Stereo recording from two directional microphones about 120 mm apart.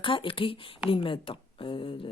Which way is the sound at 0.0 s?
45° left (ahead or behind).